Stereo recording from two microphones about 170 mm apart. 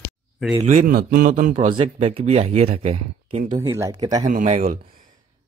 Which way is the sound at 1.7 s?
35° right (ahead or behind).